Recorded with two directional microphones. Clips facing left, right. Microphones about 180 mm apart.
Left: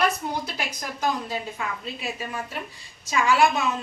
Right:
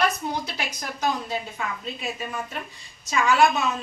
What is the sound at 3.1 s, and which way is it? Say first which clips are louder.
Speech: right 1 dB; 10° left (ahead or behind).